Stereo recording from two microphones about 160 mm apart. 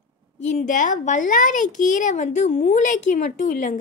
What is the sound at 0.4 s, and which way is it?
A child's voice, 50° left (ahead or behind).